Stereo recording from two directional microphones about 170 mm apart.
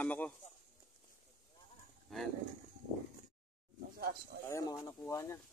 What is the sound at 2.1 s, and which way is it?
Speech, centre (ahead or behind).